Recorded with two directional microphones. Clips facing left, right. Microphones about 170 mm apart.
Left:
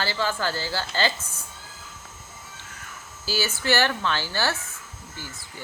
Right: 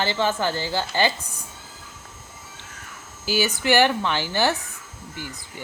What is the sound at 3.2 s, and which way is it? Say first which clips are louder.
Speech: right 4 dB; 15° right (ahead or behind).